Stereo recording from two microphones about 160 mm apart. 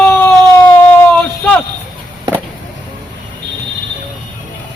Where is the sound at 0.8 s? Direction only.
10° left (ahead or behind).